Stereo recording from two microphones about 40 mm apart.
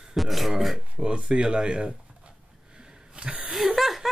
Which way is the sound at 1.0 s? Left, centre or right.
Right.